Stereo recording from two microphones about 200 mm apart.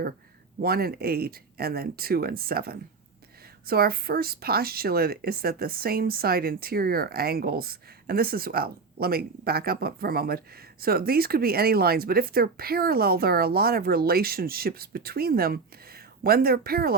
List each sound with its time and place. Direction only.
0.6 s speech: 50° right (ahead or behind)